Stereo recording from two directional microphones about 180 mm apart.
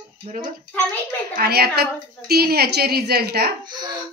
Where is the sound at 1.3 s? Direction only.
60° right (ahead or behind).